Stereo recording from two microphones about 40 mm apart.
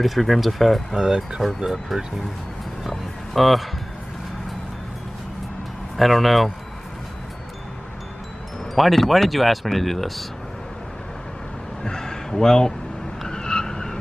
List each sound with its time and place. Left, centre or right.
0.0 s speech: centre
0.9 s speech: centre
2.9 s music: centre
5.9 s speech: centre
8.7 s speech: centre
11.8 s speech: centre
13.3 s vehicle: centre